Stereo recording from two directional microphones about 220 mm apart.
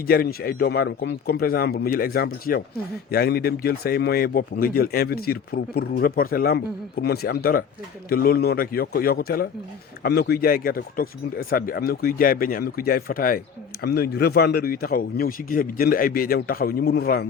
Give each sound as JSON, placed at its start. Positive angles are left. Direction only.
{"t": 0.1, "sound": "speech", "side_deg": 45}